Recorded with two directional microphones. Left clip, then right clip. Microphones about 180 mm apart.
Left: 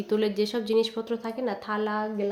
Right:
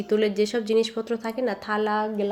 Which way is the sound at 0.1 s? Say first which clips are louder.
Right 4 dB; 15° right (ahead or behind).